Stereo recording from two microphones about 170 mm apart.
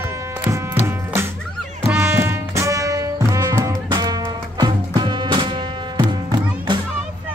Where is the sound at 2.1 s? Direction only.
15° right (ahead or behind).